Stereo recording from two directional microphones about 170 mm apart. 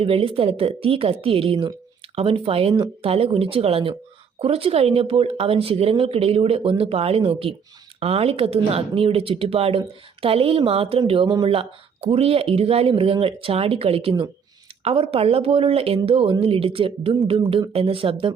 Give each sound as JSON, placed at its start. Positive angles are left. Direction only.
{"t": 0.0, "sound": "speech", "side_deg": -35}